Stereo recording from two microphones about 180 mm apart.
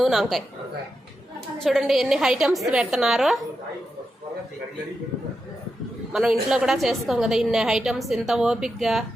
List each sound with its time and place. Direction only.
0.0 s a woman's voice: centre (ahead or behind)
1.6 s a woman's voice: centre (ahead or behind)
6.1 s a woman's voice: 5° right (ahead or behind)